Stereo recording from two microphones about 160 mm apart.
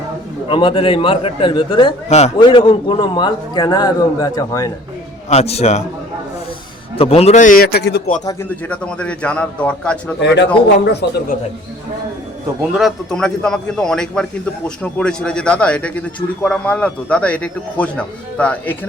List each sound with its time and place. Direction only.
0.4 s a man's voice: 35° left (ahead or behind)
2.0 s a man's voice: 40° left (ahead or behind)
2.4 s a man's voice: 30° left (ahead or behind)
5.3 s a man's voice: 40° left (ahead or behind)
6.9 s a man's voice: 35° left (ahead or behind); by 8.1 s 85° left
8.2 s a man's voice: 20° left (ahead or behind)
8.4 s a man's voice: 10° left (ahead or behind)
10.2 s a man's voice: 90° left
12.7 s a man's voice: centre (ahead or behind)